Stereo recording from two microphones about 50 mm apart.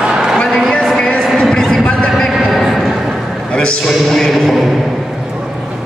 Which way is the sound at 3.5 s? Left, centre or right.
Left.